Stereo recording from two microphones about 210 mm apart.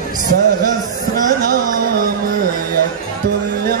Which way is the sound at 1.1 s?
40° right (ahead or behind).